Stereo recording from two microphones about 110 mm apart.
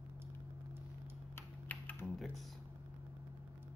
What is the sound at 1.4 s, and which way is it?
Typing, 15° left (ahead or behind).